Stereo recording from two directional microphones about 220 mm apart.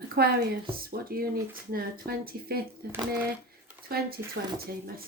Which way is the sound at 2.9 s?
10° right (ahead or behind).